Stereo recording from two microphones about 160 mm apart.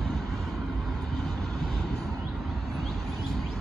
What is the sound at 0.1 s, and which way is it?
Vehicle, centre (ahead or behind).